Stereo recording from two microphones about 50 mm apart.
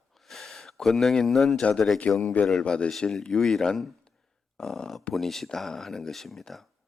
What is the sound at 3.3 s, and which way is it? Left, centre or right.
Speech, centre.